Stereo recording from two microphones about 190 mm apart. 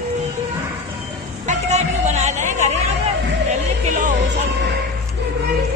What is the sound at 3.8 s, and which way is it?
Music, 40° right (ahead or behind).